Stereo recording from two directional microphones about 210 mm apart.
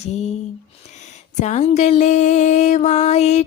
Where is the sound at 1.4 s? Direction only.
30° left (ahead or behind).